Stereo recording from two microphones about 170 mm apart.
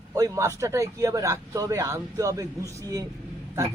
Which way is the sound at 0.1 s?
20° right (ahead or behind).